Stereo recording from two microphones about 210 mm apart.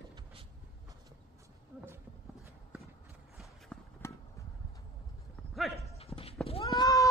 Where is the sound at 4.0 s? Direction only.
15° left (ahead or behind).